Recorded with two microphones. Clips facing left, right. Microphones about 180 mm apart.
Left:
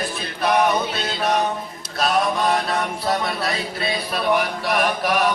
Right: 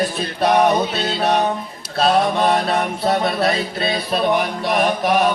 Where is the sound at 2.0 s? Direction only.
30° right (ahead or behind).